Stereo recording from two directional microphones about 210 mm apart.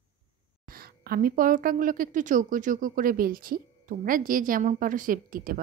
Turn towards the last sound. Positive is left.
turn(degrees=-40)  # may be behind; listen again after turning